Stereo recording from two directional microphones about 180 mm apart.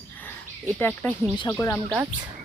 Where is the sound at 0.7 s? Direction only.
10° left (ahead or behind).